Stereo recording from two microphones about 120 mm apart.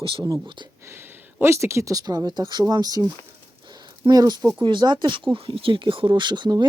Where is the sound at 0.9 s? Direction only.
20° right (ahead or behind).